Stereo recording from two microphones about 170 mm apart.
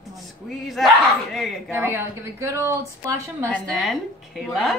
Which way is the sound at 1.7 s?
15° right (ahead or behind).